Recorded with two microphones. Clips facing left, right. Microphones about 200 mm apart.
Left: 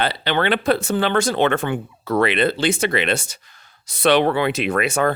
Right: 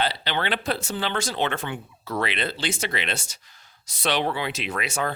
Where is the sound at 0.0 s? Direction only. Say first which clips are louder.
Left 6 dB; 60° left (ahead or behind).